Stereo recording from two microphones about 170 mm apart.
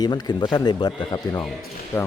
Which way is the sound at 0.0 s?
25° left (ahead or behind).